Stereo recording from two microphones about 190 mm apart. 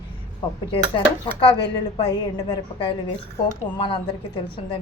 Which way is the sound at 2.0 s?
20° left (ahead or behind).